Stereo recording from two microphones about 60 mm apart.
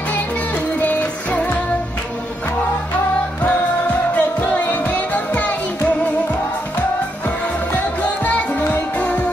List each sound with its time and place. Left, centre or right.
0.7 s music: left
4.1 s music: left
7.2 s music: left